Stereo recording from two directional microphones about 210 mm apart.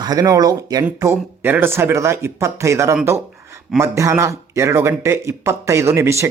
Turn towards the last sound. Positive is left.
turn(degrees=-15)  # may be behind; listen again after turning